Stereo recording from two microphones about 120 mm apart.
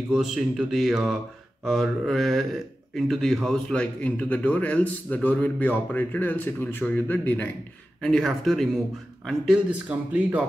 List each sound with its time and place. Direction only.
0.1 s a man's voice: centre (ahead or behind); by 7.4 s 15° left (ahead or behind)
8.0 s speech: 5° left (ahead or behind)
9.5 s speech: 10° right (ahead or behind)